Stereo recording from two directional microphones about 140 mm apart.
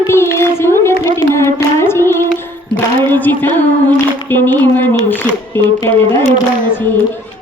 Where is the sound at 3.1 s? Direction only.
15° left (ahead or behind).